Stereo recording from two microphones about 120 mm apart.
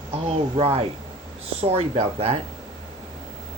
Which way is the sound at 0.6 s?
50° right (ahead or behind).